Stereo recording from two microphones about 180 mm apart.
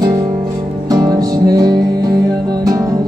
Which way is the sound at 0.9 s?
20° right (ahead or behind).